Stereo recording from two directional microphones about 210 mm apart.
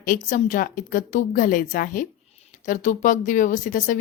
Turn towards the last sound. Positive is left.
turn(degrees=40)  # may be behind; listen again after turning